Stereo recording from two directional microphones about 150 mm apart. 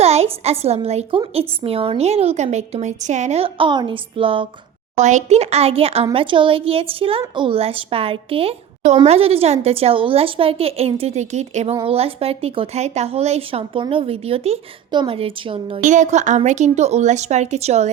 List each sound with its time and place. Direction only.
0.0 s a woman's voice: 45° right (ahead or behind)
4.9 s a woman's voice: 50° right (ahead or behind)
15.8 s a woman's voice: 55° right (ahead or behind)